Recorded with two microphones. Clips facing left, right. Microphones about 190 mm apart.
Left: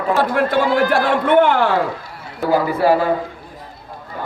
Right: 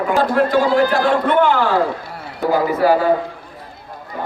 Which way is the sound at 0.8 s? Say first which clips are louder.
Even; 55° left (ahead or behind).